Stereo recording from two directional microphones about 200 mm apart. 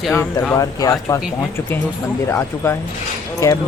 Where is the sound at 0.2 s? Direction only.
15° left (ahead or behind).